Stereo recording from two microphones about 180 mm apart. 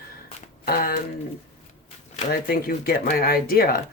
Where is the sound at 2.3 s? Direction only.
55° left (ahead or behind).